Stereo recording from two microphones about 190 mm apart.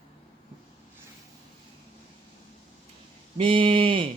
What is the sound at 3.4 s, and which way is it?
Speech, 25° right (ahead or behind).